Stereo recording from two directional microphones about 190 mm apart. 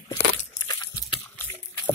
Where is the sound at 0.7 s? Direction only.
20° left (ahead or behind).